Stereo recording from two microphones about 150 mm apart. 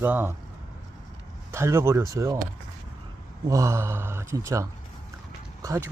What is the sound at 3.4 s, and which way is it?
Speech, 20° right (ahead or behind).